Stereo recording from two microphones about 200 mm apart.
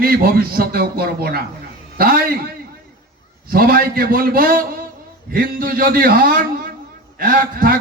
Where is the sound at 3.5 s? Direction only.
45° right (ahead or behind).